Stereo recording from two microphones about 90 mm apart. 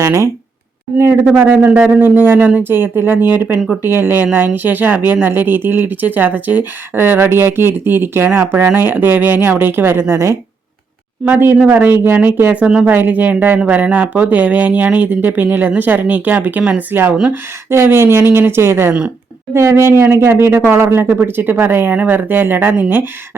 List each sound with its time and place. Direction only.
0.0 s speech: 35° right (ahead or behind)
1.2 s speech: 10° right (ahead or behind); by 10.3 s 30° right (ahead or behind)
11.3 s speech: 20° right (ahead or behind)